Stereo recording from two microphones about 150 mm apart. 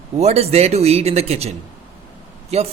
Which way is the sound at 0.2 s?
45° right (ahead or behind).